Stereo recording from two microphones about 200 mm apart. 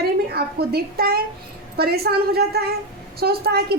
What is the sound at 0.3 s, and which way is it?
A woman's voice, 50° right (ahead or behind).